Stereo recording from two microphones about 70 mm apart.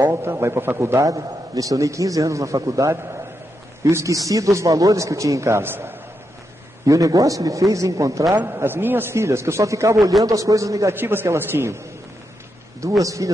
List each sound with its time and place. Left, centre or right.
0.1 s a man's voice: right
1.0 s a man's voice: right
5.6 s a man's voice: right
6.9 s a man's voice: right
8.5 s a man's voice: right
9.1 s a man's voice: right
11.0 s a man's voice: right
12.8 s a man's voice: right